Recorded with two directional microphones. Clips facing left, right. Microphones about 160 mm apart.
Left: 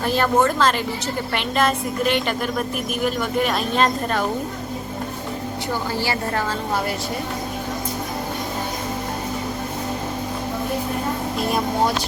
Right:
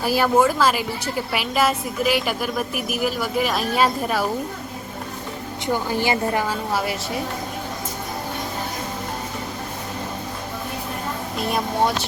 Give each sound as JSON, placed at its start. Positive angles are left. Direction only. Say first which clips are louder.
{"t": 0.0, "sound": "a woman's voice", "louder": "right 1 dB", "side_deg": -10}
{"t": 5.6, "sound": "a woman's voice", "louder": "right 4 dB", "side_deg": -15}